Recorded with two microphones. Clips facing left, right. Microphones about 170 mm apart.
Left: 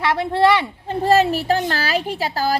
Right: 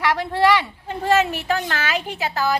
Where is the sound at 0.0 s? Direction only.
25° left (ahead or behind).